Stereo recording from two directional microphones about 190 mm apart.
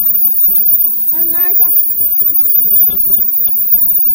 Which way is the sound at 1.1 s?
20° left (ahead or behind).